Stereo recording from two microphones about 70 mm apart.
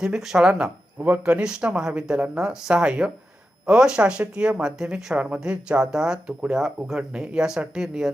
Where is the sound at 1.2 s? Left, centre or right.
Centre.